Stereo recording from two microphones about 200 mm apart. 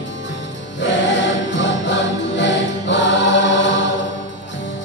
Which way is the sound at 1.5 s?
65° left (ahead or behind).